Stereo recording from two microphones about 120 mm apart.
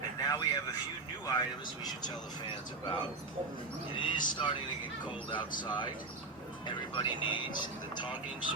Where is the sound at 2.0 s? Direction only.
40° left (ahead or behind).